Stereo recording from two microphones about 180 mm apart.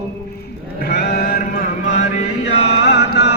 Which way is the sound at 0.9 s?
60° left (ahead or behind).